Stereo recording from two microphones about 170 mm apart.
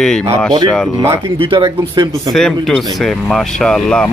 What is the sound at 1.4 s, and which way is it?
Speech, 30° right (ahead or behind).